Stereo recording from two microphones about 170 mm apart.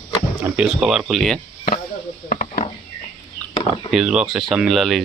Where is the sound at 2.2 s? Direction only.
45° left (ahead or behind).